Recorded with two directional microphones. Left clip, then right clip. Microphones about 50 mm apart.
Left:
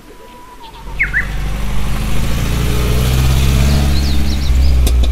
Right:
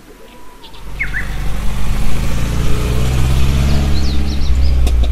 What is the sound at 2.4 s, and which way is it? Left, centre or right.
Vehicle, left.